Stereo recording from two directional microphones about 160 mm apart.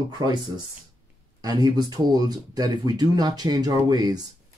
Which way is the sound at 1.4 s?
25° right (ahead or behind).